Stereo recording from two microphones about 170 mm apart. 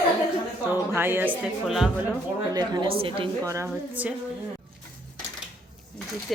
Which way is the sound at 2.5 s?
25° right (ahead or behind).